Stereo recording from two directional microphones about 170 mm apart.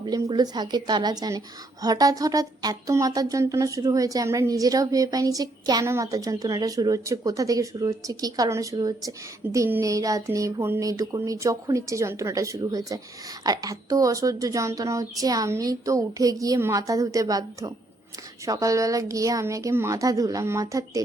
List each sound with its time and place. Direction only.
0.0 s speech: 25° right (ahead or behind)